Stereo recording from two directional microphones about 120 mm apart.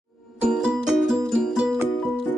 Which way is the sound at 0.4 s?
5° right (ahead or behind).